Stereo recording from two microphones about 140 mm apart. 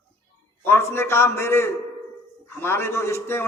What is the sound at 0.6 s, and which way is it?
A man's voice, 15° left (ahead or behind).